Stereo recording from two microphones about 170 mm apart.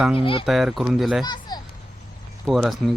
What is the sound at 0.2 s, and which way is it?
Speech, 30° left (ahead or behind).